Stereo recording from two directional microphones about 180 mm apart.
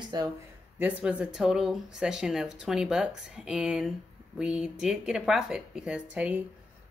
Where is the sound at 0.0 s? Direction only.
20° right (ahead or behind).